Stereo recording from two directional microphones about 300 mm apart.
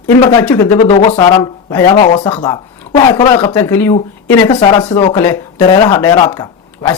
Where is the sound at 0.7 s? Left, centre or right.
Left.